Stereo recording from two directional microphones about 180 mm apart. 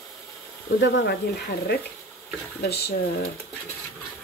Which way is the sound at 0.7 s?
75° left (ahead or behind).